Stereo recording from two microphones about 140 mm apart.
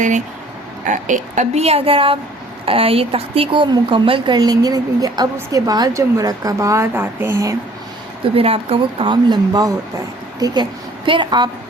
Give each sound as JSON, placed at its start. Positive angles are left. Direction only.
{"t": 0.9, "sound": "speech", "side_deg": -65}
{"t": 4.4, "sound": "a woman's voice", "side_deg": -25}
{"t": 8.4, "sound": "a woman's voice", "side_deg": -45}